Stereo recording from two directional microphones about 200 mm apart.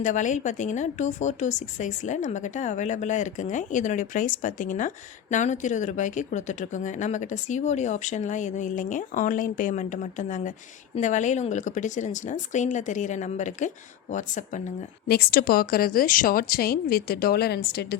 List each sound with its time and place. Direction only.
0.0 s speech: 40° left (ahead or behind)
15.0 s speech: 50° left (ahead or behind)